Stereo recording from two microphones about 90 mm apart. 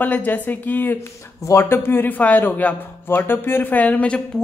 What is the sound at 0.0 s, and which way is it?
Speech, 20° left (ahead or behind).